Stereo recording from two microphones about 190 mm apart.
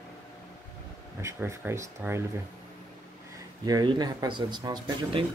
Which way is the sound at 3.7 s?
20° right (ahead or behind).